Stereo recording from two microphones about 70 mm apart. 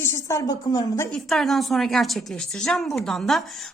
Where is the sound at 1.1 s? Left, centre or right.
Centre.